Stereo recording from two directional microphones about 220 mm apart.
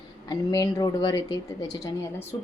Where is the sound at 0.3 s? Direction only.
15° left (ahead or behind).